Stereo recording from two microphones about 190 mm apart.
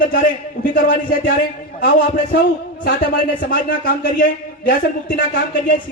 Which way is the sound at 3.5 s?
50° left (ahead or behind).